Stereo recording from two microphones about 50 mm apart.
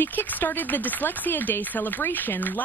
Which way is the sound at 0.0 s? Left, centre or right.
Left.